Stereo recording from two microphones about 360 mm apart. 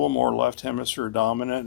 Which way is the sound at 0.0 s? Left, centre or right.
Left.